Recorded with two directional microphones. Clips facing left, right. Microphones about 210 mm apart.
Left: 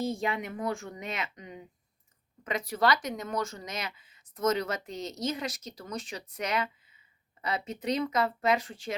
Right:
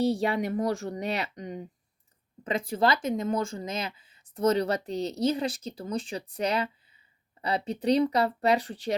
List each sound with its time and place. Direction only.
0.0 s speech: 35° right (ahead or behind)